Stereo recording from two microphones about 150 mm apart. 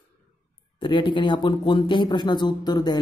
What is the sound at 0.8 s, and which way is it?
Speech, 35° left (ahead or behind).